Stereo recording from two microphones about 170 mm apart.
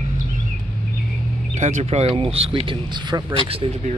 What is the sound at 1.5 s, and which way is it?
Speech, 45° right (ahead or behind).